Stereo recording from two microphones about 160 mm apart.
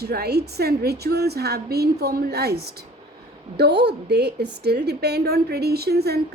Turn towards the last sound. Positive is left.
turn(degrees=-85)